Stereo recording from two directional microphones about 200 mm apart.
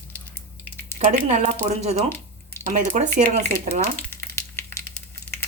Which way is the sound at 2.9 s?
40° right (ahead or behind).